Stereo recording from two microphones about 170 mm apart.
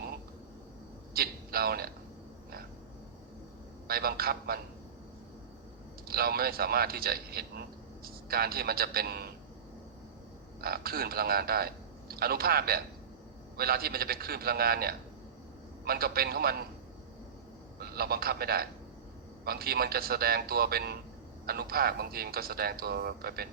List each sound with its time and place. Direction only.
1.1 s a sound: 65° right (ahead or behind)
3.8 s a man's voice: 65° right (ahead or behind)
6.1 s a man's voice: 65° right (ahead or behind)
10.6 s a man's voice: 65° right (ahead or behind)
17.7 s a man's voice: 65° right (ahead or behind)